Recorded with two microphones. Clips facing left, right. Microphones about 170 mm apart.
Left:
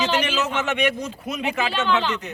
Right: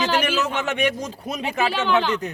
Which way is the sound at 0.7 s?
35° right (ahead or behind).